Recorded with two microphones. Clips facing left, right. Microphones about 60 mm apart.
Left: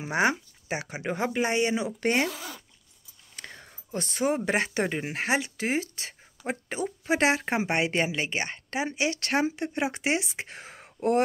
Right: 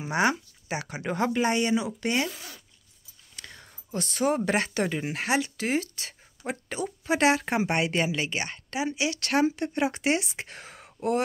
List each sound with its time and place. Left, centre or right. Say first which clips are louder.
0.0 s speech: even; left
2.0 s speech: left 2 dB; left
3.3 s whispering: left 2 dB; left
4.5 s speech: even; left